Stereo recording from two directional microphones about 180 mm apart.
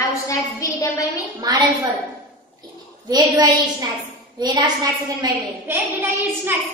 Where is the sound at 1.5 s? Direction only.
20° right (ahead or behind).